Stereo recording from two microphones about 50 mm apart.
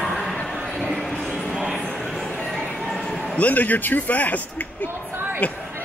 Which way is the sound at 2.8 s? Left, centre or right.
Centre.